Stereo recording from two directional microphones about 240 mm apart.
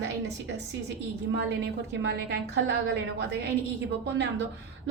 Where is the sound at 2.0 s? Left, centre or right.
Right.